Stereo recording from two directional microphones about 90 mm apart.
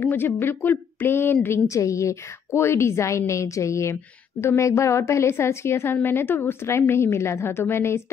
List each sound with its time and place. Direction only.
0.0 s a woman's voice: 25° left (ahead or behind)